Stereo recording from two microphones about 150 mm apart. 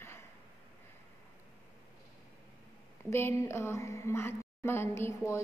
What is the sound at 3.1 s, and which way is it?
A woman's voice, 15° left (ahead or behind).